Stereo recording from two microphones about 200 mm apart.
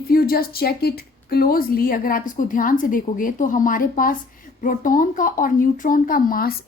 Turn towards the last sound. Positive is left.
turn(degrees=45)  # may be behind; listen again after turning